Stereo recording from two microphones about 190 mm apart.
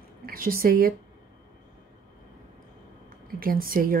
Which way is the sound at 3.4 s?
50° right (ahead or behind).